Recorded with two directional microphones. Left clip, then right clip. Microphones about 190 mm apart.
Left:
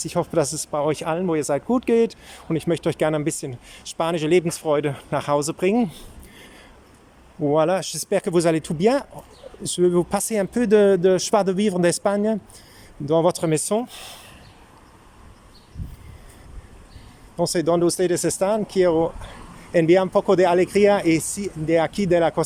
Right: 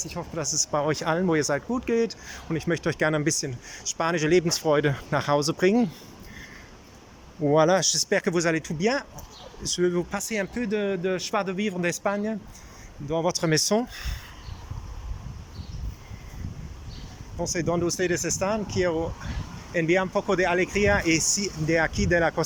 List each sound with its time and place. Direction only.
0.0 s speech: 30° left (ahead or behind); by 5.9 s 15° left (ahead or behind)
7.4 s speech: 10° left (ahead or behind)
8.1 s speech: 20° left (ahead or behind)
17.3 s speech: 25° left (ahead or behind)